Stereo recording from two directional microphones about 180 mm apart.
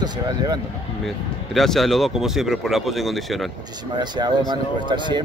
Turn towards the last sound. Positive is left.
turn(degrees=-25)  # may be behind; listen again after turning